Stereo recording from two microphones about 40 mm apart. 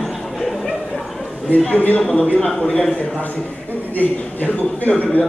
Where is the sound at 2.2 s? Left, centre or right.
Left.